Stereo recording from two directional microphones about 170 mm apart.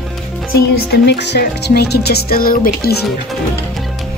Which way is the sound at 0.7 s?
70° left (ahead or behind).